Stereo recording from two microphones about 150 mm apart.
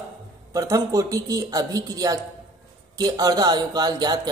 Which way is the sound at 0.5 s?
25° right (ahead or behind).